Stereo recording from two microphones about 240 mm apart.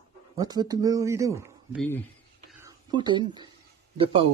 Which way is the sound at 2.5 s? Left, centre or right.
Centre.